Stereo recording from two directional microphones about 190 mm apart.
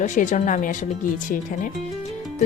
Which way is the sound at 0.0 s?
40° left (ahead or behind).